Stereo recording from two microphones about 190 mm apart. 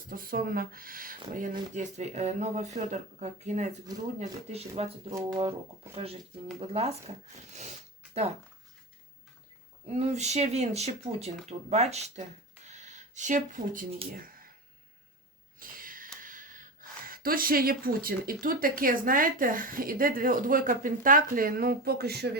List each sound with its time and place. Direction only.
0.1 s speech: 50° right (ahead or behind)
9.9 s speech: 35° right (ahead or behind)
12.6 s a sound: 35° right (ahead or behind)
15.5 s snort: 45° right (ahead or behind)
16.2 s gasp: 45° right (ahead or behind)
17.1 s speech: 50° right (ahead or behind)